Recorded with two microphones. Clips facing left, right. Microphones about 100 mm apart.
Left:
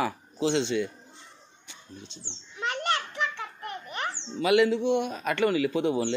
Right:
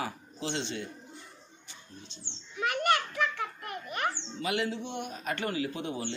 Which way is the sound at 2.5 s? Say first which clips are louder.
Right 1 dB; 25° left (ahead or behind).